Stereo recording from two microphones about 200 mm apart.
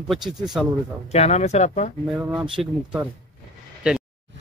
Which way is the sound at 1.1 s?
35° left (ahead or behind).